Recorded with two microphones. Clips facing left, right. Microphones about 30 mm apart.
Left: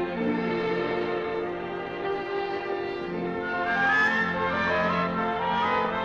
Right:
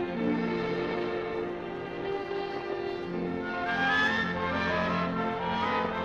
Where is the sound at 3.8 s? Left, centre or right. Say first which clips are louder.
Left 3 dB; right.